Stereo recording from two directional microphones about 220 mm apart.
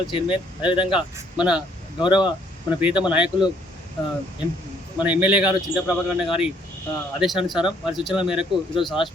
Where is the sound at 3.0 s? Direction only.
5° right (ahead or behind).